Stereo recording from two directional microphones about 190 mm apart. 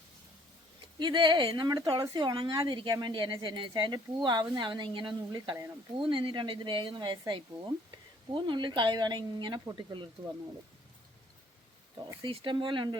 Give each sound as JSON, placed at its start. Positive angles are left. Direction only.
{"t": 0.9, "sound": "a woman's voice", "side_deg": -25}
{"t": 12.2, "sound": "a woman's voice", "side_deg": -25}